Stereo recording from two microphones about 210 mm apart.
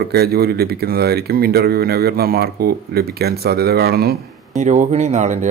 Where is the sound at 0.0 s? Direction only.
50° right (ahead or behind).